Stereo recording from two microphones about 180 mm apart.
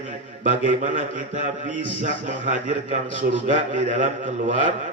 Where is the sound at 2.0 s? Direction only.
45° right (ahead or behind).